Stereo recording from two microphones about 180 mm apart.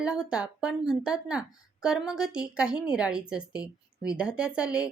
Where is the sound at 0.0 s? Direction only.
5° right (ahead or behind).